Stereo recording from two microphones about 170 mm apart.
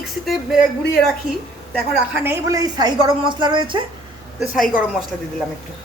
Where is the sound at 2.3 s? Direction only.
20° right (ahead or behind).